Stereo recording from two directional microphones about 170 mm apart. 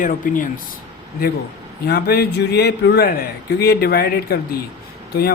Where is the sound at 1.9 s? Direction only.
65° left (ahead or behind).